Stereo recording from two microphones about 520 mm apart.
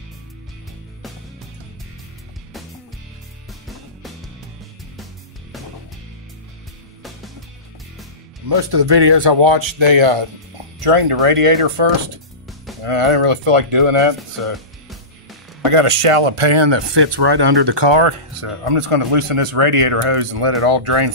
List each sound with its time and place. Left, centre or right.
3.6 s music: centre
8.5 s speech: right
10.8 s speech: right
15.6 s speech: right